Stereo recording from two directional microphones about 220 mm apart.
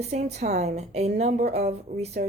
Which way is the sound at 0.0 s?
30° right (ahead or behind).